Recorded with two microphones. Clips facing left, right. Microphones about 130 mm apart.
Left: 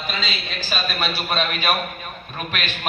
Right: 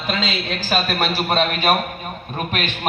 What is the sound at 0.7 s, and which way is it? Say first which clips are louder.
Speech: right 5 dB; 55° right (ahead or behind).